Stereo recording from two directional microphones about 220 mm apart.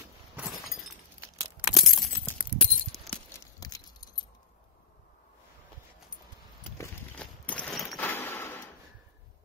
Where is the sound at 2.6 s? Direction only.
5° left (ahead or behind).